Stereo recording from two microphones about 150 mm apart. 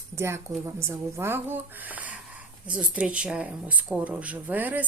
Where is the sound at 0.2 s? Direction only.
15° right (ahead or behind).